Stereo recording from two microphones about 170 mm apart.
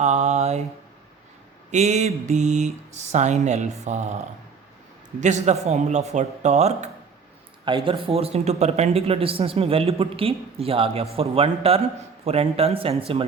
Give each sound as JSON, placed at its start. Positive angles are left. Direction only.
{"t": 0.0, "sound": "mantra", "side_deg": -40}
{"t": 1.7, "sound": "mantra", "side_deg": -45}
{"t": 5.2, "sound": "mantra", "side_deg": -45}
{"t": 7.6, "sound": "speech", "side_deg": -30}